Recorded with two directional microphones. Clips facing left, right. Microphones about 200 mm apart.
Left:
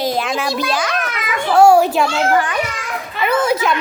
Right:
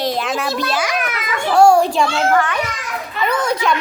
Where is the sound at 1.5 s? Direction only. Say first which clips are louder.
Left 1 dB; 5° left (ahead or behind).